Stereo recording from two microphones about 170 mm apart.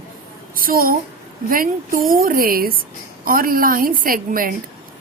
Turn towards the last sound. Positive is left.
turn(degrees=-55)  # may be behind; listen again after turning